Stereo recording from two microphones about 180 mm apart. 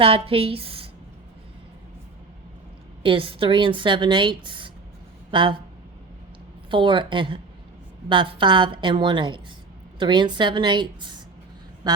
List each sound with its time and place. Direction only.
0.0 s a woman's voice: 30° right (ahead or behind)
3.0 s a woman's voice: 30° right (ahead or behind)
6.7 s a woman's voice: 25° right (ahead or behind)